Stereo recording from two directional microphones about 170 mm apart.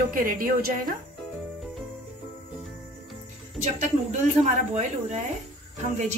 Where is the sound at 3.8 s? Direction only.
45° right (ahead or behind).